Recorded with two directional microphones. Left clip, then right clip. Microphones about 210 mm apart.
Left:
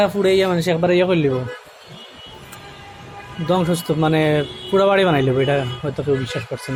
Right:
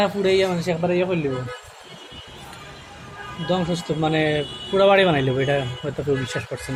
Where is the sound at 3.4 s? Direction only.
30° left (ahead or behind); by 6.7 s 15° left (ahead or behind).